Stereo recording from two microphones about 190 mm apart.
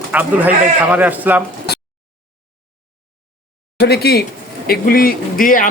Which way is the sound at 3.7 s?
55° left (ahead or behind).